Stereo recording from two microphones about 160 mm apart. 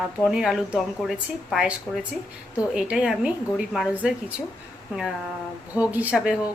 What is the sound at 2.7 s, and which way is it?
A woman's voice, 5° right (ahead or behind).